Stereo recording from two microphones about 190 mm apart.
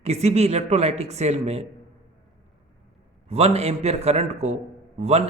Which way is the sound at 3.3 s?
30° right (ahead or behind).